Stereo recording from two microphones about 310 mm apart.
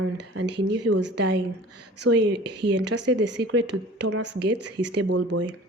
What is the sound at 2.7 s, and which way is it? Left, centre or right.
Speech, right.